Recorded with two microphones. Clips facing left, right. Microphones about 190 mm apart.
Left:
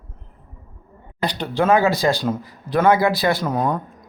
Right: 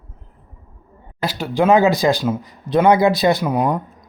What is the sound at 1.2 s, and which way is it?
Speech, 5° right (ahead or behind).